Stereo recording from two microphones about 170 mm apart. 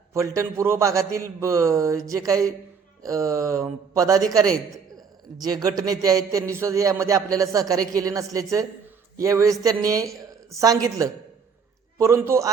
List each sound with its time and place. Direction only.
0.1 s a man's voice: 15° right (ahead or behind)